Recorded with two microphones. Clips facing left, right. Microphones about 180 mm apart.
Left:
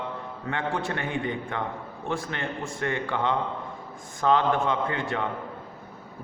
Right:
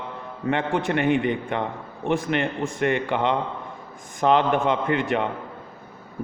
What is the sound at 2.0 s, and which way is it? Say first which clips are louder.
A man's voice: right 8 dB; 20° right (ahead or behind).